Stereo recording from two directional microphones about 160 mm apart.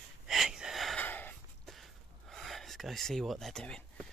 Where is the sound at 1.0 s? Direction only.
10° left (ahead or behind).